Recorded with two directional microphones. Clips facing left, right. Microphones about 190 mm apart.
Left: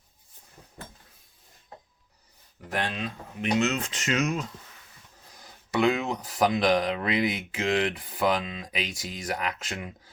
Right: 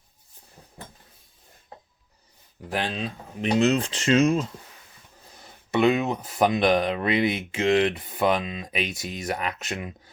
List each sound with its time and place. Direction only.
2.6 s speech: 30° right (ahead or behind)